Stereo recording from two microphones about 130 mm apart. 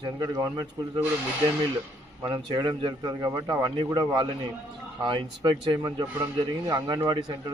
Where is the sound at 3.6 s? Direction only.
35° right (ahead or behind).